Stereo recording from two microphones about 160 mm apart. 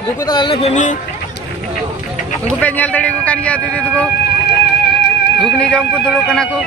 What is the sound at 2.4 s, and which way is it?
Speech, 10° left (ahead or behind).